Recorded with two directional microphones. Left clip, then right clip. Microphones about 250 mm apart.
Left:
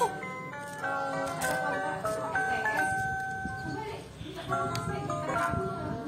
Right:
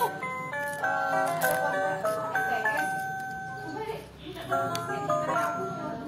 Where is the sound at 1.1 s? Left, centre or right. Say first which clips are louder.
Right 6 dB; right.